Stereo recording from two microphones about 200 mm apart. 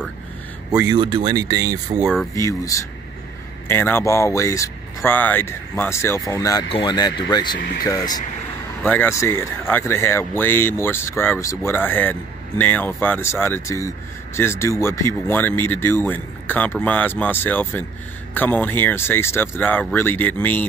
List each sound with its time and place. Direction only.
0.7 s speech: 20° right (ahead or behind)
2.4 s speech: 15° left (ahead or behind)
8.8 s speech: 10° left (ahead or behind)